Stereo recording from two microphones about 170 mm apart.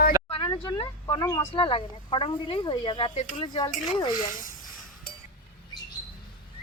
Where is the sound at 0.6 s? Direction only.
30° left (ahead or behind).